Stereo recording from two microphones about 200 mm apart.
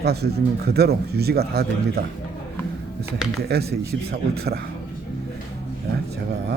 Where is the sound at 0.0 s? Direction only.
55° right (ahead or behind).